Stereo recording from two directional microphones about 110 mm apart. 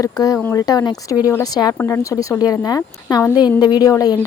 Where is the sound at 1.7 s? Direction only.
20° left (ahead or behind).